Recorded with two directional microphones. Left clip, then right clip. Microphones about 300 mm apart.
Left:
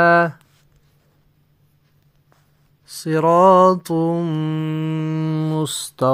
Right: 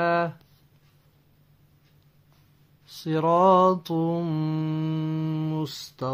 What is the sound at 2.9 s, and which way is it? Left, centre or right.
Mantra, centre.